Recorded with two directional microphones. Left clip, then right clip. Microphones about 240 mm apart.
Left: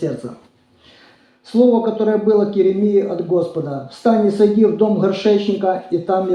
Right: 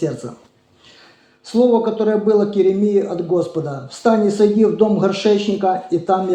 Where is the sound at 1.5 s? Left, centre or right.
Right.